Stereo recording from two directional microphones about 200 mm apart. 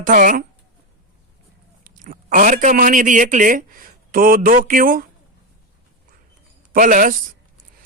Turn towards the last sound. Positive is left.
turn(degrees=-45)  # may be behind; listen again after turning